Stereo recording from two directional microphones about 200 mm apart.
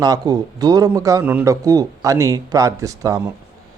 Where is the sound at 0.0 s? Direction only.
20° right (ahead or behind).